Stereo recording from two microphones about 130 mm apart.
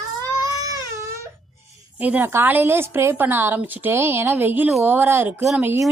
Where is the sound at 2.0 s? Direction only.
15° right (ahead or behind).